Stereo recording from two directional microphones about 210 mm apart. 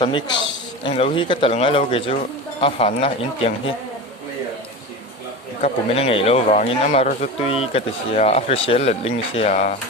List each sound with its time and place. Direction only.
0.0 s speech: 20° left (ahead or behind)
5.6 s speech: 30° left (ahead or behind)